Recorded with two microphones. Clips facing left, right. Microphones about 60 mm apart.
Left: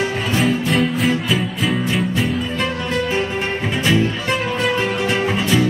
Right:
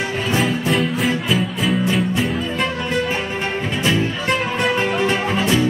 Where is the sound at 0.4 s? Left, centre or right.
Centre.